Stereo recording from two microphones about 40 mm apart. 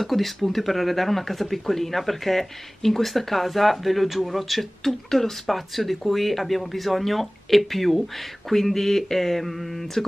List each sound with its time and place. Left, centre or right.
0.0 s speech: centre
5.1 s speech: centre
5.5 s speech: centre